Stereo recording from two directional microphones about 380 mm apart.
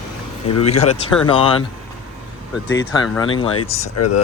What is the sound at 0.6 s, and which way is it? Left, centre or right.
Speech, centre.